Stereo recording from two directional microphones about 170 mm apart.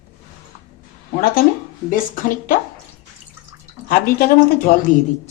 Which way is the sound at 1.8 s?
55° left (ahead or behind).